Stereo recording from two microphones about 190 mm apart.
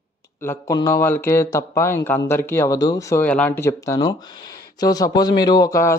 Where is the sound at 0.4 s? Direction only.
15° left (ahead or behind).